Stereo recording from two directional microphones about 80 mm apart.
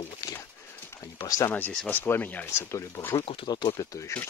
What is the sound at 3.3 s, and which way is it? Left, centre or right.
Speech, left.